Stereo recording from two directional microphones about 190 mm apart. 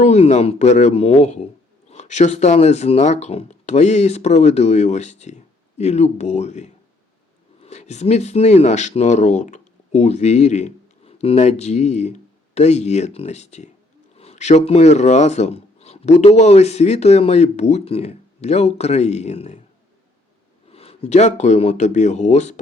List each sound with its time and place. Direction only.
0.0 s speech: 35° left (ahead or behind)
20.7 s speech: 30° left (ahead or behind)